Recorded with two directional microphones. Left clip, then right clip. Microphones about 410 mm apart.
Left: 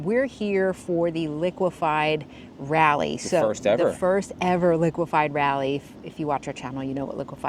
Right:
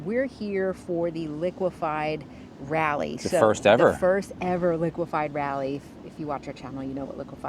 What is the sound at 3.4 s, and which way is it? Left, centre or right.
Speech, right.